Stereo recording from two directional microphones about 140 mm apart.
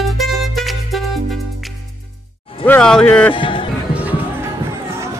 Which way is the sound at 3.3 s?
40° left (ahead or behind).